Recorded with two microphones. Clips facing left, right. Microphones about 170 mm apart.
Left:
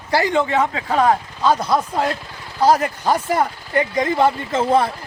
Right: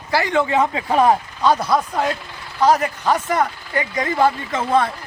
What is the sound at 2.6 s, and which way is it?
Speech, 35° left (ahead or behind).